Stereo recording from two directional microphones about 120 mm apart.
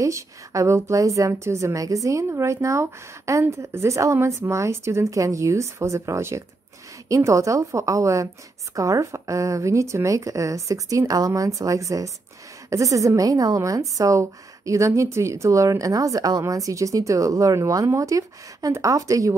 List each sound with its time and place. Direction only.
0.0 s a woman's voice: 25° right (ahead or behind)